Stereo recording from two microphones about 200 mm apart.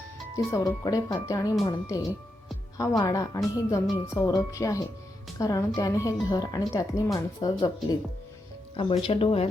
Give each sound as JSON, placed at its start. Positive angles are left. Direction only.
{"t": 0.3, "sound": "speech", "side_deg": 15}